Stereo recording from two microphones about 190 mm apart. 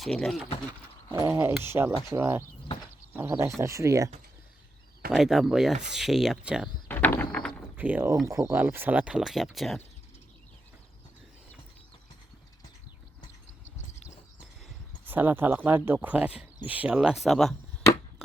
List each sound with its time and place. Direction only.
0.0 s speech: centre (ahead or behind)
1.1 s speech: 15° right (ahead or behind)
5.1 s speech: centre (ahead or behind)
6.8 s a sound: 10° left (ahead or behind)
7.8 s speech: 10° right (ahead or behind)
15.0 s speech: 10° right (ahead or behind)